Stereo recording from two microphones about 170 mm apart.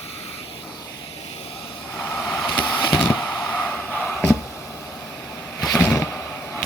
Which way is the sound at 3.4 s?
5° left (ahead or behind).